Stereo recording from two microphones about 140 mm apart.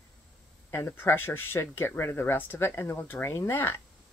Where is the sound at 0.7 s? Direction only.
20° left (ahead or behind).